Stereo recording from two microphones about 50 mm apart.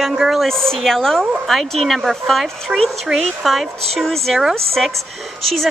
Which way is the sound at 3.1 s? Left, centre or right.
Centre.